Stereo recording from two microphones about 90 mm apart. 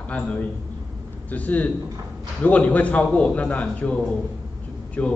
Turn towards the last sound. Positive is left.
turn(degrees=20)  # may be behind; listen again after turning